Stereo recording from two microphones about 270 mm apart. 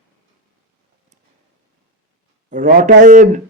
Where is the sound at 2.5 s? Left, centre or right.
Right.